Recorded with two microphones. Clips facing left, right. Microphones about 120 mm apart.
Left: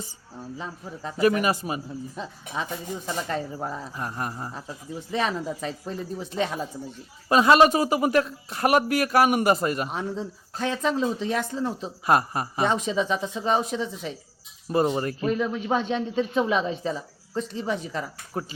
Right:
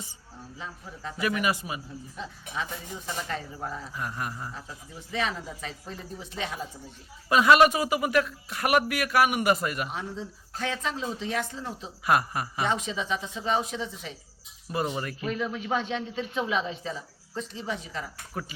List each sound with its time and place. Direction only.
0.6 s speech: 35° left (ahead or behind)
7.3 s speech: 30° left (ahead or behind)
12.0 s speech: 30° left (ahead or behind); by 18.0 s 45° left (ahead or behind)
18.3 s speech: 30° left (ahead or behind)